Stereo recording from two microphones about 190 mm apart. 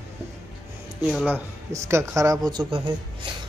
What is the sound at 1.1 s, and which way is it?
Speech, 10° right (ahead or behind).